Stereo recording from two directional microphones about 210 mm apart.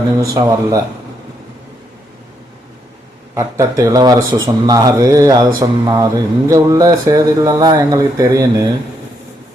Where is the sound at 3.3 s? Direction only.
15° right (ahead or behind).